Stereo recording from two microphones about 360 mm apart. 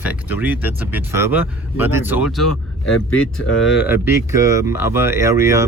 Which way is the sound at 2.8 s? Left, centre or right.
Left.